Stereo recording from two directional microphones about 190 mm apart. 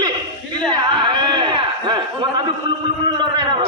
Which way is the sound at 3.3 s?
20° right (ahead or behind).